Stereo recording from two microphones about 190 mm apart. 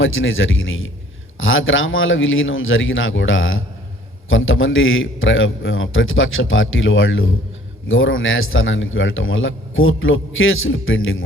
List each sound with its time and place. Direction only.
0.0 s a man's voice: 90° left